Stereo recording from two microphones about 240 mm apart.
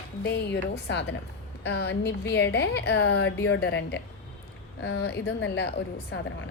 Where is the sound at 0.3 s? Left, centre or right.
Left.